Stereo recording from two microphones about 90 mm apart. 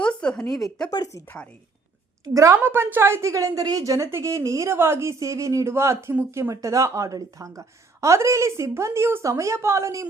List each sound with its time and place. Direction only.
0.0 s a sound: 10° left (ahead or behind)
2.2 s a woman's voice: 35° right (ahead or behind)
2.6 s a woman's voice: 25° right (ahead or behind)